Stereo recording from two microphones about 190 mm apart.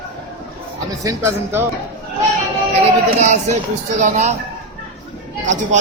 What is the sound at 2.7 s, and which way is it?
Speech, 35° right (ahead or behind).